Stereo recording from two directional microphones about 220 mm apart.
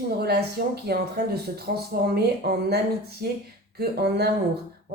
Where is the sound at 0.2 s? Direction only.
45° right (ahead or behind).